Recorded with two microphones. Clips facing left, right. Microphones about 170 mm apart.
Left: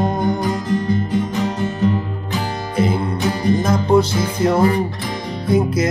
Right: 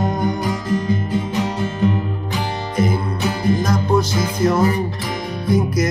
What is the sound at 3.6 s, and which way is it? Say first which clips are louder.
Music: left 3 dB; 30° left (ahead or behind).